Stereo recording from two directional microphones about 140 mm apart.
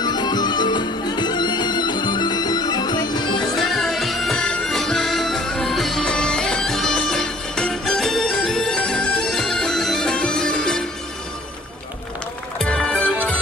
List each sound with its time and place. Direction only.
0.0 s music: 30° left (ahead or behind)
3.5 s music: centre (ahead or behind)
12.5 s music: 5° left (ahead or behind)